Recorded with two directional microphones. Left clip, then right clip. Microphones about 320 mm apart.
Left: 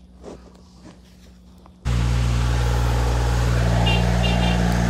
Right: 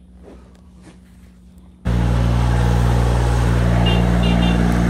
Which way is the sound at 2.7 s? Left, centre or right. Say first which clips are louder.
Right 4 dB; right.